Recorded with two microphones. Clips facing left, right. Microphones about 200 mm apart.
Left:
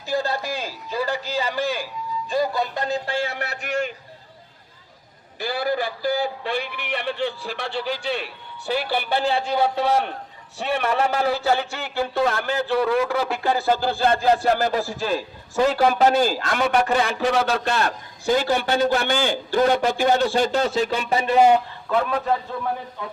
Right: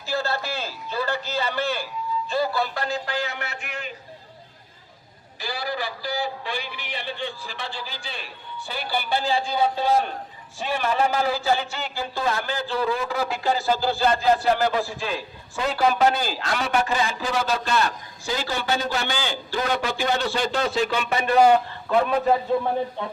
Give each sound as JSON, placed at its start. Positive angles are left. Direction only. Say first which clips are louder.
{"t": 0.1, "sound": "a man's voice", "louder": "left 2 dB", "side_deg": 15}
{"t": 5.4, "sound": "a man's voice", "louder": "left 6 dB", "side_deg": 55}
{"t": 21.8, "sound": "a man's voice", "louder": "right 2 dB", "side_deg": -5}
{"t": 22.5, "sound": "a man's voice", "louder": "right 5 dB", "side_deg": -20}